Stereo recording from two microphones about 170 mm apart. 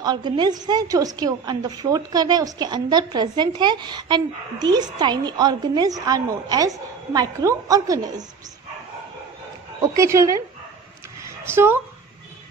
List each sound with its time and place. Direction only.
0.0 s a woman's voice: 25° right (ahead or behind)
9.8 s a woman's voice: 20° right (ahead or behind)
11.4 s a woman's voice: 15° right (ahead or behind)